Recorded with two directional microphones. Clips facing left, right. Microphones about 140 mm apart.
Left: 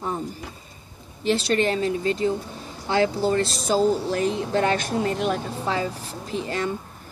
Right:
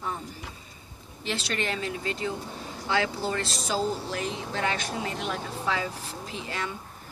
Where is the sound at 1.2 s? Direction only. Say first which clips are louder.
Left 10 dB; 40° left (ahead or behind).